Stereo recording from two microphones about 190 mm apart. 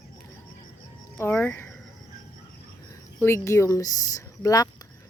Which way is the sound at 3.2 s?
15° left (ahead or behind).